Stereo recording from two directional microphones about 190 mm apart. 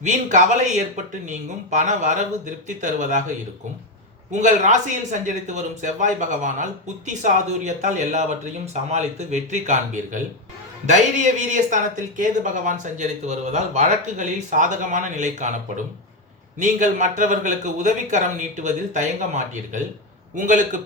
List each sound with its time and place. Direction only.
0.0 s speech: 40° right (ahead or behind)
4.3 s a man's voice: 40° right (ahead or behind)